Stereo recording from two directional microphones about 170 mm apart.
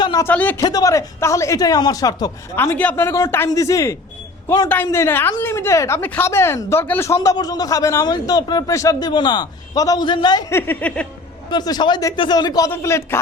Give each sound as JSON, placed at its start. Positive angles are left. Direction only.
{"t": 0.0, "sound": "a sound", "side_deg": 25}
{"t": 0.3, "sound": "a woman's voice", "side_deg": 10}
{"t": 0.6, "sound": "a man's voice", "side_deg": 20}
{"t": 10.5, "sound": "a woman's voice", "side_deg": 10}
{"t": 11.5, "sound": "speech", "side_deg": 25}